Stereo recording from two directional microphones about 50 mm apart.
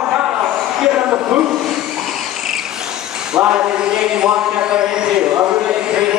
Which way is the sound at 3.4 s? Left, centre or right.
Centre.